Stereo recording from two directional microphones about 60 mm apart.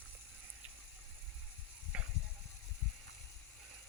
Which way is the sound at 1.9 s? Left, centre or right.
Centre.